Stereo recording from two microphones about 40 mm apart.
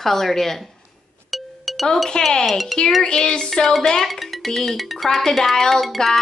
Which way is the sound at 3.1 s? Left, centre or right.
Left.